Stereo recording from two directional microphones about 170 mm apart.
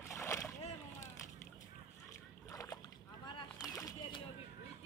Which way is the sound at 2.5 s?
20° left (ahead or behind).